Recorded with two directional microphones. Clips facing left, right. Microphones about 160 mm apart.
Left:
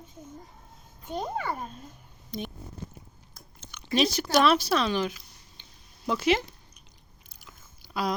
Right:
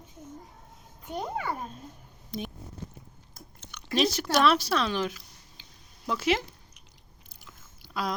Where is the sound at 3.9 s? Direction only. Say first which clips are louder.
Left 1 dB; centre (ahead or behind).